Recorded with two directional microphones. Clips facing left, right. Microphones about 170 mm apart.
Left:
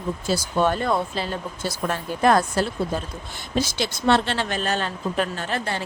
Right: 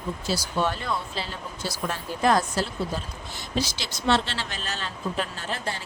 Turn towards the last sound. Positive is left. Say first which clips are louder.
# left 5 dB
turn(degrees=60)  # may be behind; listen again after turning